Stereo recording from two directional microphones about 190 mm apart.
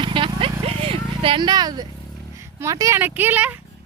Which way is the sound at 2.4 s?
15° right (ahead or behind).